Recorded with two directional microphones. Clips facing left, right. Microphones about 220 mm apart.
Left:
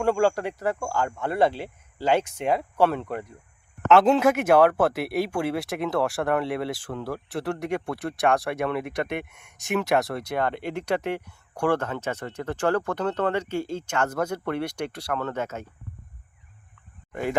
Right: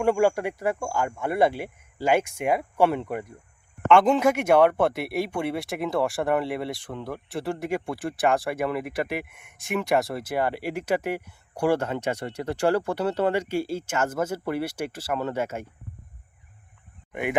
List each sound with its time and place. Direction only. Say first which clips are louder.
0.0 s speech: right 1 dB; 15° right (ahead or behind)
3.8 s speech: left 1 dB; 5° left (ahead or behind)
17.1 s speech: even; 20° right (ahead or behind)